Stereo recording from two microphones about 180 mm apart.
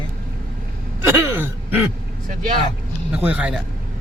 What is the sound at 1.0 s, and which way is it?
Gasp, 15° right (ahead or behind).